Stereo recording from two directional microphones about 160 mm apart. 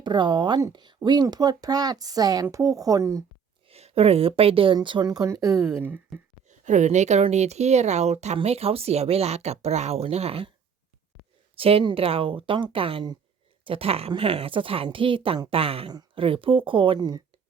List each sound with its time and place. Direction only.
0.0 s speech: 30° right (ahead or behind)
3.7 s speech: 40° right (ahead or behind); by 6.0 s 15° right (ahead or behind)
6.5 s speech: 50° right (ahead or behind)
11.5 s speech: 35° right (ahead or behind)